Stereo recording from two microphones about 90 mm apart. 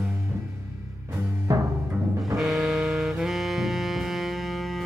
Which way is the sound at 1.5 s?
40° right (ahead or behind).